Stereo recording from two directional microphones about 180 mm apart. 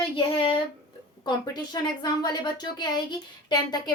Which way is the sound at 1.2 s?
25° left (ahead or behind).